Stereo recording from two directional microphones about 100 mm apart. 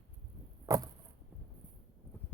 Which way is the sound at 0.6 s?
40° right (ahead or behind).